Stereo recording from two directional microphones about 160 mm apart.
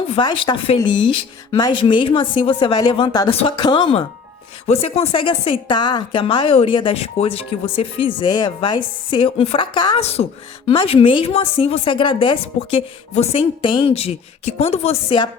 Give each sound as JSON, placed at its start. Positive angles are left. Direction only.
{"t": 0.2, "sound": "a woman's voice", "side_deg": 30}
{"t": 10.0, "sound": "a woman's voice", "side_deg": 40}